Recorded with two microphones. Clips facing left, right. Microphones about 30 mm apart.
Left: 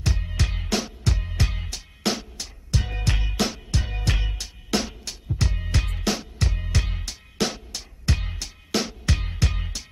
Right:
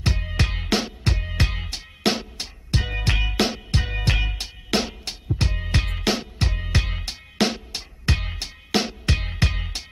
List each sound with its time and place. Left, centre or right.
0.2 s music: right